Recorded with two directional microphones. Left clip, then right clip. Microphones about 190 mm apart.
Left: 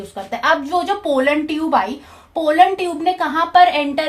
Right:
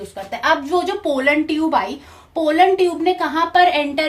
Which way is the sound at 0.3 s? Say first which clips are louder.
Left 1 dB; 30° left (ahead or behind).